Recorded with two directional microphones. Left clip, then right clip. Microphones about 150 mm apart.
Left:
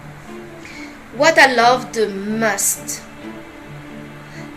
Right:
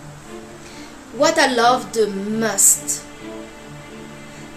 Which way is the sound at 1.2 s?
30° right (ahead or behind).